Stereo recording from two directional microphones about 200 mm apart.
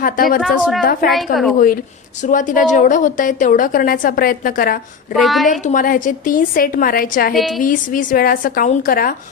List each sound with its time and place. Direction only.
0.0 s a woman's voice: 45° left (ahead or behind)
0.4 s a woman's voice: centre (ahead or behind)
1.5 s a woman's voice: 45° left (ahead or behind)
5.1 s a woman's voice: centre (ahead or behind)
5.5 s a woman's voice: 40° left (ahead or behind)
7.3 s a woman's voice: centre (ahead or behind)
7.6 s a woman's voice: 40° left (ahead or behind)